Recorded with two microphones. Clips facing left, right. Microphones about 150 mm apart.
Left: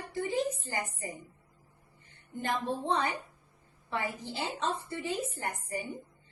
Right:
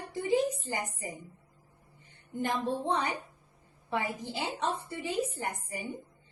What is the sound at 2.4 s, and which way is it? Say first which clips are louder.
A woman's voice: right 1 dB; 15° right (ahead or behind).